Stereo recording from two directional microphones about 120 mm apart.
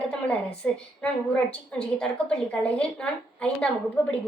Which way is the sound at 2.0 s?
10° left (ahead or behind).